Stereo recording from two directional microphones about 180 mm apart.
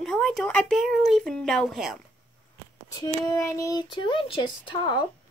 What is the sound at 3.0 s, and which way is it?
Child singing, 20° left (ahead or behind).